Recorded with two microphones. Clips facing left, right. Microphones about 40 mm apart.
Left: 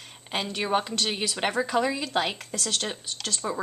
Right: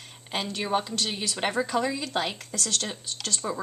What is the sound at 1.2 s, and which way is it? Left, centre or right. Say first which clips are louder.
Speech: right 1 dB; centre.